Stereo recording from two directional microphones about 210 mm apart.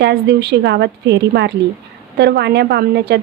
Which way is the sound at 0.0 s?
55° right (ahead or behind).